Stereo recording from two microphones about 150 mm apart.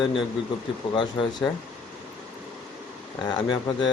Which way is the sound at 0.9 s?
35° left (ahead or behind).